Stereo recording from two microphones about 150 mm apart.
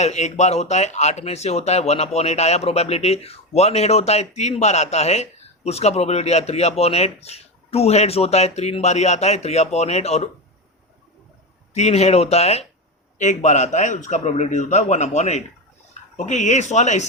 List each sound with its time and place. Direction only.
0.0 s speech: 50° left (ahead or behind)
11.7 s speech: 45° left (ahead or behind)